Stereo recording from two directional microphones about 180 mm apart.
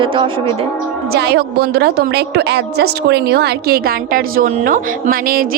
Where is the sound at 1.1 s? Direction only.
65° right (ahead or behind).